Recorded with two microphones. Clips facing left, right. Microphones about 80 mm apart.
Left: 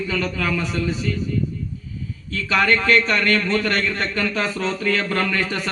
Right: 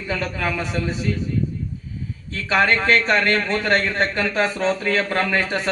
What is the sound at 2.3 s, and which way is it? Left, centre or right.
A man's voice, right.